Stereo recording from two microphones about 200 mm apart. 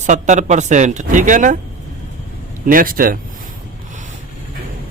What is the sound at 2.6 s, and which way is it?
Speech, 45° right (ahead or behind).